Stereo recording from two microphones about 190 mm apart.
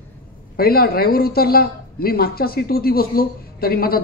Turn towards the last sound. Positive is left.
turn(degrees=50)  # may be behind; listen again after turning